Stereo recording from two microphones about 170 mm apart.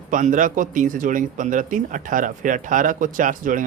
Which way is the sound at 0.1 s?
50° right (ahead or behind).